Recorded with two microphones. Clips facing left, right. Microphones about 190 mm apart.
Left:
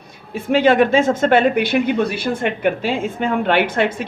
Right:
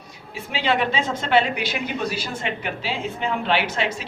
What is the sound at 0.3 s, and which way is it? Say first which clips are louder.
Speech: left 10 dB; 50° left (ahead or behind).